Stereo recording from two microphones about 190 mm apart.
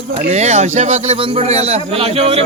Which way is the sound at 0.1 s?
35° right (ahead or behind).